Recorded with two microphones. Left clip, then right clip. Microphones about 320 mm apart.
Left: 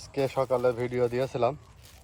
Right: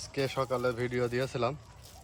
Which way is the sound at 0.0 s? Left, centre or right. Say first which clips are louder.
Left 4 dB; centre.